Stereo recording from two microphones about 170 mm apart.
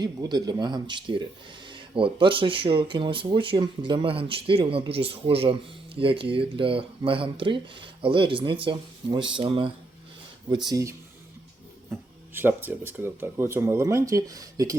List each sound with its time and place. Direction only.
0.0 s speech: 25° right (ahead or behind)
10.7 s speech: 20° right (ahead or behind)